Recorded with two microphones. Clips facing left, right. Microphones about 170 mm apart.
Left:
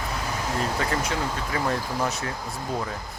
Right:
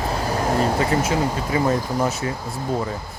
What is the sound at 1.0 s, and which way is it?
Speech, 5° right (ahead or behind).